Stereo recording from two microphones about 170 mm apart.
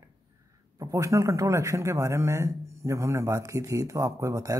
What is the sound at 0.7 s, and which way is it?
A man's voice, 20° right (ahead or behind).